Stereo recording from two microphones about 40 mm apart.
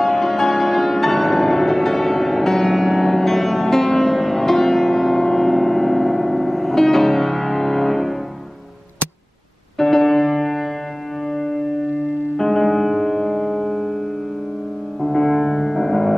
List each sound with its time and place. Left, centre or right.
0.0 s music: centre
9.8 s music: centre
15.0 s music: centre